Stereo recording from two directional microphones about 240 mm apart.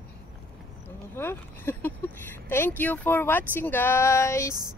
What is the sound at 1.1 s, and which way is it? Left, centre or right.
Speech, centre.